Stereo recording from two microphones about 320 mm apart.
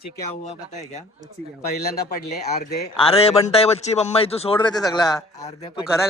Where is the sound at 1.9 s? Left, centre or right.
Left.